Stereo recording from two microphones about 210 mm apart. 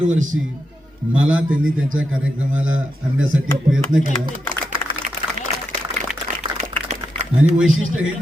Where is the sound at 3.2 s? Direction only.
65° right (ahead or behind).